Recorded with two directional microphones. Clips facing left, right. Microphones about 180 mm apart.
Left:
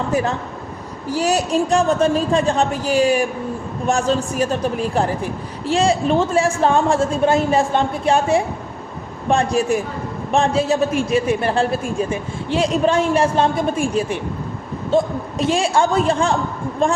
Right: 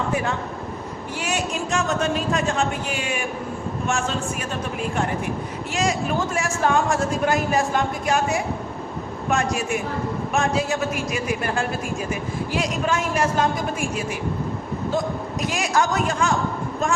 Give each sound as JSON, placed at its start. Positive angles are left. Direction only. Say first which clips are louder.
{"t": 0.1, "sound": "a man's voice", "louder": "left 4 dB", "side_deg": 35}